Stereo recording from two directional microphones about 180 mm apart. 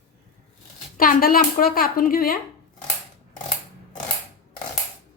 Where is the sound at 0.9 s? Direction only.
50° left (ahead or behind).